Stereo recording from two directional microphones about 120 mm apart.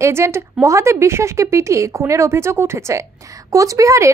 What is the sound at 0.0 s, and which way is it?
A woman's voice, 20° right (ahead or behind).